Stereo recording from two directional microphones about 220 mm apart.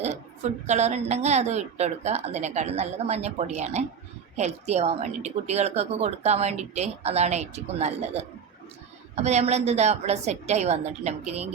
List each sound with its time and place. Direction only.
0.0 s a woman's voice: 30° right (ahead or behind)